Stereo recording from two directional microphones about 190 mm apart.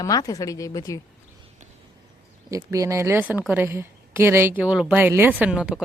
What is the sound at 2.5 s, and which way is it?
A woman's voice, 15° right (ahead or behind).